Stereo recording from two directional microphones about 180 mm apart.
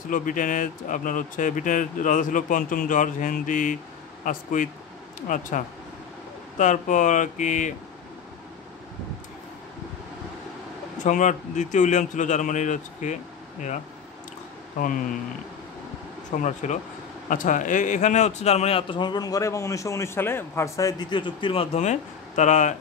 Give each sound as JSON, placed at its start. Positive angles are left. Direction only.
{"t": 0.1, "sound": "speech", "side_deg": 45}
{"t": 6.6, "sound": "speech", "side_deg": 45}
{"t": 11.1, "sound": "speech", "side_deg": 45}
{"t": 16.3, "sound": "a man's voice", "side_deg": 40}